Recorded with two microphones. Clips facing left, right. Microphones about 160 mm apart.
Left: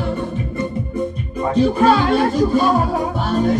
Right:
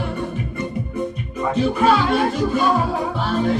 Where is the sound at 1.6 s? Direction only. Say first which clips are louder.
Left 4 dB; 40° left (ahead or behind).